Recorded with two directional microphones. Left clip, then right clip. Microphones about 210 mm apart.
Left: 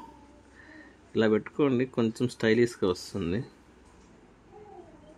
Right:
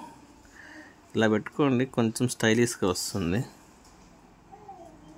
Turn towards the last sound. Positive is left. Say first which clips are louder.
# right 3 dB
turn(degrees=-15)  # may be behind; listen again after turning